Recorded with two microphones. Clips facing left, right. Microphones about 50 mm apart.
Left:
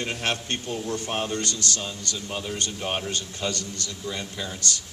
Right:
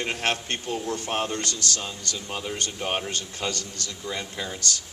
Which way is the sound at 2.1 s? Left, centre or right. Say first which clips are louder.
Even; centre.